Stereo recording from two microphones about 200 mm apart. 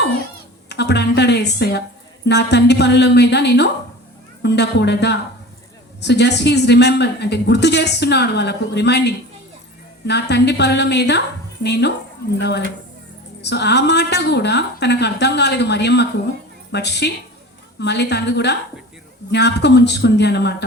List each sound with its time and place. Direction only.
0.7 s speech: 55° left (ahead or behind)